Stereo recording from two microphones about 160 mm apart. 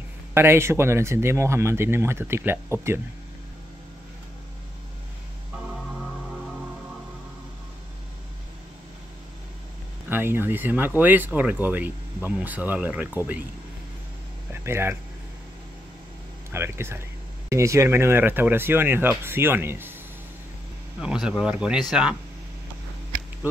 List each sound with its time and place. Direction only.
0.3 s speech: 15° right (ahead or behind)
10.0 s speech: 15° right (ahead or behind)
14.5 s speech: 15° right (ahead or behind)
16.5 s speech: 15° right (ahead or behind)
21.0 s speech: 5° right (ahead or behind)